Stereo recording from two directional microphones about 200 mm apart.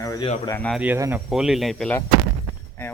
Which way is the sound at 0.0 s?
15° left (ahead or behind).